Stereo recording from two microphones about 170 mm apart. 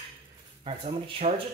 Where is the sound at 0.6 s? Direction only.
35° right (ahead or behind).